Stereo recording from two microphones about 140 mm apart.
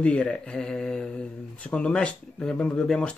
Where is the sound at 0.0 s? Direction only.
10° left (ahead or behind).